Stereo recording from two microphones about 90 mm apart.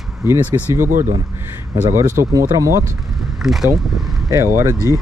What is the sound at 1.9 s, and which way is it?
Speech, 35° right (ahead or behind).